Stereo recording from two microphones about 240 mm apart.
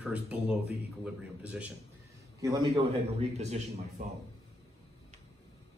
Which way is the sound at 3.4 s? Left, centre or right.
Right.